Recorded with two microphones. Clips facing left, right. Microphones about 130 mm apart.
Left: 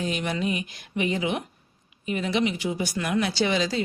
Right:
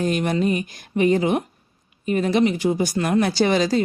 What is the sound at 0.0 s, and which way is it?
Speech, 45° right (ahead or behind).